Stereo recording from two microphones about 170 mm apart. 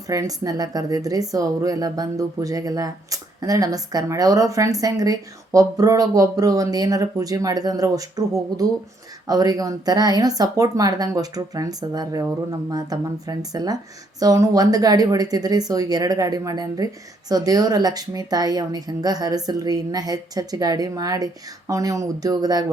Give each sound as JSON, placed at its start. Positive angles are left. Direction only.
{"t": 0.1, "sound": "speech", "side_deg": -20}